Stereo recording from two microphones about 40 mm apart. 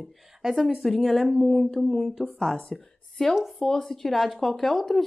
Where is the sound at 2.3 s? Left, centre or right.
Centre.